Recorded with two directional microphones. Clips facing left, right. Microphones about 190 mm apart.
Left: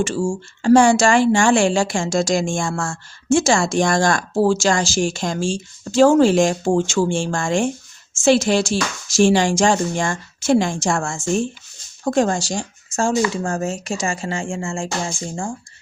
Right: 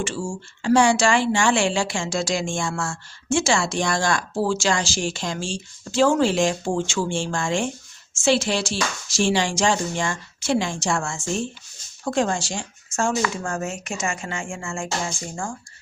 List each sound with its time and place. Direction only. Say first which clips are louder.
0.0 s speech: left 7 dB; 40° left (ahead or behind)